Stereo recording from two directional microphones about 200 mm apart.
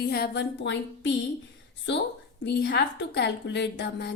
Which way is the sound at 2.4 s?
55° left (ahead or behind).